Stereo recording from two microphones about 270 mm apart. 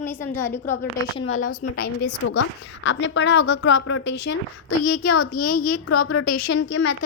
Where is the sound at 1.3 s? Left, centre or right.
Left.